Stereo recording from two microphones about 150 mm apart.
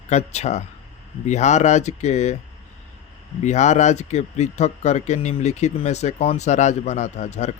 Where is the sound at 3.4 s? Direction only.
50° left (ahead or behind).